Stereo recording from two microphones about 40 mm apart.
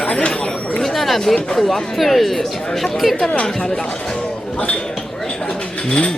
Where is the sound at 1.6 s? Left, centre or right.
Centre.